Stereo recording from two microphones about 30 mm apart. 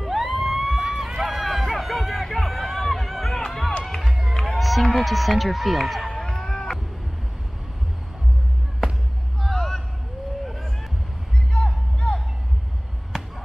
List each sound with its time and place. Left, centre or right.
0.0 s a sound: centre
0.9 s run: centre
1.2 s run: centre
2.2 s a sound: centre
3.3 s music: centre
4.0 s music: centre
4.3 s music: centre
4.6 s speech: centre
6.4 s cat: centre
9.5 s a sound: centre
10.4 s a sound: centre
11.5 s music: left